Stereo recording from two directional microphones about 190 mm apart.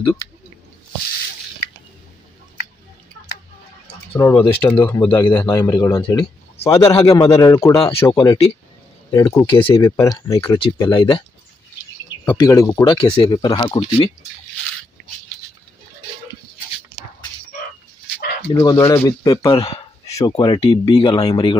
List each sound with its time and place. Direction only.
4.1 s speech: 10° left (ahead or behind)
10.6 s speech: 25° left (ahead or behind)
12.4 s speech: 20° left (ahead or behind)
18.5 s speech: 20° left (ahead or behind)